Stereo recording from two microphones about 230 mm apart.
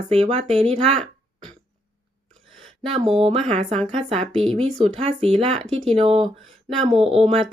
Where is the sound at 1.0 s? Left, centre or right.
Centre.